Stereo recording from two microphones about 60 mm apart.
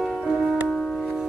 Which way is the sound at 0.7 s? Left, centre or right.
Centre.